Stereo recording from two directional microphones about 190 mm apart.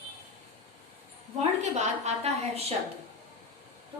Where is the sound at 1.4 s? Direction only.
35° right (ahead or behind).